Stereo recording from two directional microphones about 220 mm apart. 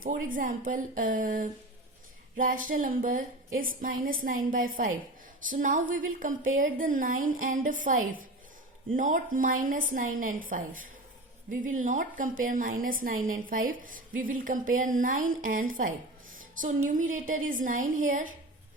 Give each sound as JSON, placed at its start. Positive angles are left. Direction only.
{"t": 0.0, "sound": "a woman's voice", "side_deg": -35}